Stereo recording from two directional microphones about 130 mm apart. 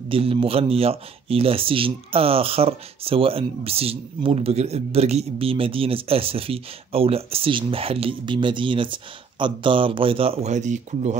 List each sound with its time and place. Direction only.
0.1 s speech: 45° right (ahead or behind)
10.5 s speech: 65° right (ahead or behind)